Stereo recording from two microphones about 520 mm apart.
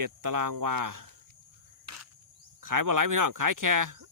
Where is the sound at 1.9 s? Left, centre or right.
Right.